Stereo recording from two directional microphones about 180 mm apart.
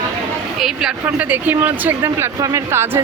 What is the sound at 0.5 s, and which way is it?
Speech, centre (ahead or behind).